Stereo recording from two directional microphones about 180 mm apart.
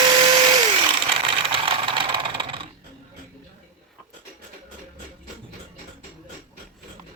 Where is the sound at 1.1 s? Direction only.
30° right (ahead or behind).